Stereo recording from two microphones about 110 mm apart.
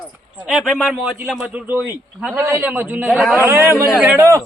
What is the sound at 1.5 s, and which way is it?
A man's voice, 15° right (ahead or behind).